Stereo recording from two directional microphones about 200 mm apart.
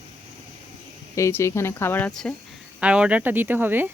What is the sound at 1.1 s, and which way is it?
Speech, 15° left (ahead or behind).